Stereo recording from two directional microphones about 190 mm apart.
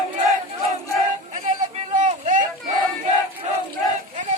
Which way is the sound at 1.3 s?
40° right (ahead or behind).